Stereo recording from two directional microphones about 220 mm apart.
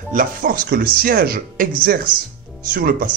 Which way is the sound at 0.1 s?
40° right (ahead or behind).